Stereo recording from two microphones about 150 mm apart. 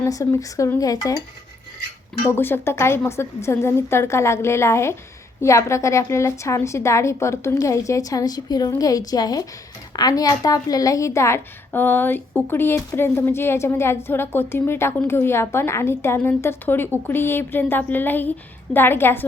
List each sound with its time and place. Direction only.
0.0 s a woman's voice: 20° left (ahead or behind)
2.2 s a woman's voice: 15° left (ahead or behind)